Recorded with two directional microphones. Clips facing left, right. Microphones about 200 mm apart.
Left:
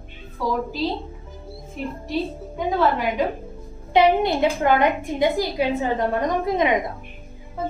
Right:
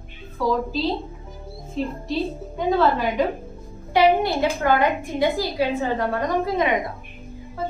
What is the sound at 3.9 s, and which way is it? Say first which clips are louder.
A woman's voice: left 1 dB; 20° left (ahead or behind).